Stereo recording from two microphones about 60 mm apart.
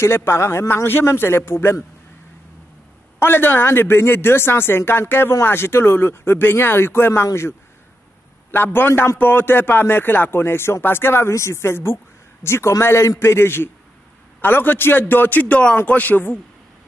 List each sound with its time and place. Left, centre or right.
0.0 s speech: left
3.2 s a man's voice: left
8.5 s a man's voice: left